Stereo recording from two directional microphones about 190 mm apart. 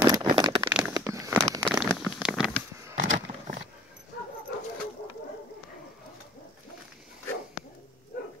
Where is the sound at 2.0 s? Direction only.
5° right (ahead or behind).